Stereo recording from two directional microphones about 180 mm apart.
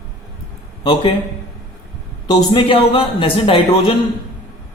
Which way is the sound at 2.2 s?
25° left (ahead or behind).